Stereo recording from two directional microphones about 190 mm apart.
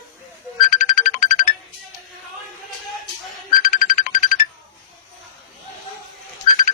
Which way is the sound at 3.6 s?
45° left (ahead or behind).